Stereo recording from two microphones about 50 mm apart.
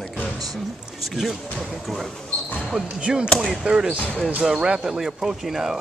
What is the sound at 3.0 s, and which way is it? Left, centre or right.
Speech, centre.